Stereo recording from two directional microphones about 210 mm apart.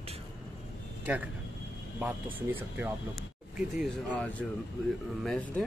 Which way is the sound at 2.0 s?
10° right (ahead or behind).